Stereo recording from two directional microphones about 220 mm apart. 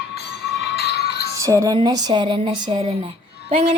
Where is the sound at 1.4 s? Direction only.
15° right (ahead or behind).